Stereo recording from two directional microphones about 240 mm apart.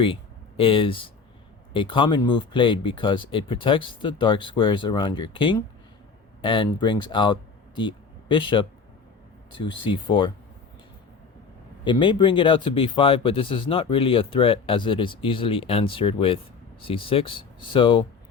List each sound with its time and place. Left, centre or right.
0.0 s speech: left
11.9 s speech: centre